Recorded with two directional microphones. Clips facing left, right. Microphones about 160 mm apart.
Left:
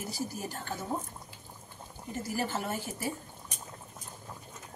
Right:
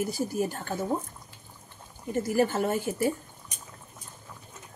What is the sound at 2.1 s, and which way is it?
Speech, 55° right (ahead or behind).